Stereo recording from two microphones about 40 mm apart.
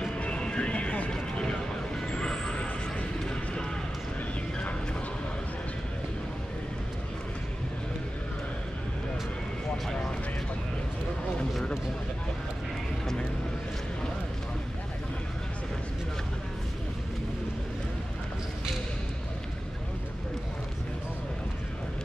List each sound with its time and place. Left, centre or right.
0.2 s music: left
1.1 s vehicle: left